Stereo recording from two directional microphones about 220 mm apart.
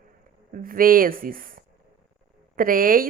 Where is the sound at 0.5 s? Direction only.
40° right (ahead or behind).